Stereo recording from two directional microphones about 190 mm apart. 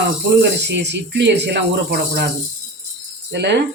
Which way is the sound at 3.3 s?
65° right (ahead or behind).